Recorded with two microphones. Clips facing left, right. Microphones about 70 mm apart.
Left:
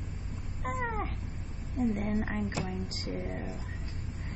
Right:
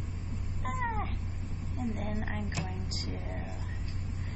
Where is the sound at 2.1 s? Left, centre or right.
Left.